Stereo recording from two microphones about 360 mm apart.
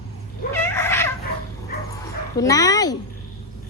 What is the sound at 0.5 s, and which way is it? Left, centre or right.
Cat, centre.